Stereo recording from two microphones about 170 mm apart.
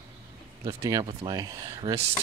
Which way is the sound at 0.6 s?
20° right (ahead or behind).